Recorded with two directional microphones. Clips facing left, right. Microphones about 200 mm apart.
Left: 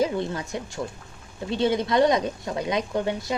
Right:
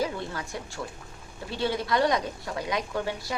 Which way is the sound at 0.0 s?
20° left (ahead or behind).